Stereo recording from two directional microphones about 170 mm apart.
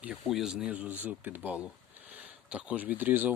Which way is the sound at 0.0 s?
5° right (ahead or behind).